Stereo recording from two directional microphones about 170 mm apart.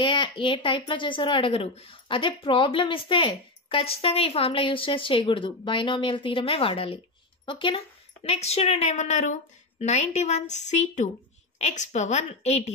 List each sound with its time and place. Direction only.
0.0 s a woman's voice: 30° left (ahead or behind)